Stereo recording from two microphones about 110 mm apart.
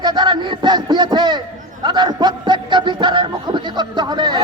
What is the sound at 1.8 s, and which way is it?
Speech, 45° right (ahead or behind).